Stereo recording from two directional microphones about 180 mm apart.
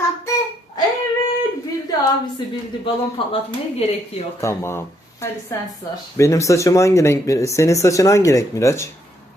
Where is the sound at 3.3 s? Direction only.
35° left (ahead or behind).